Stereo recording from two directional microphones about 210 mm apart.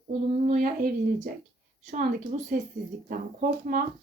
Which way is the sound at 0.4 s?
40° right (ahead or behind).